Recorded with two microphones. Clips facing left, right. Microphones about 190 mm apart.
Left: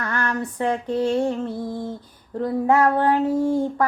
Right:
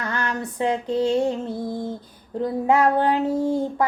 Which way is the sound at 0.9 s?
20° right (ahead or behind).